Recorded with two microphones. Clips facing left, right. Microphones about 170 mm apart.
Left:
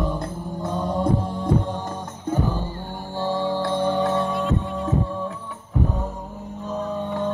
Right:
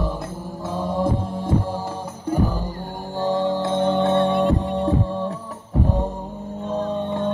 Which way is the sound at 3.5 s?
20° right (ahead or behind).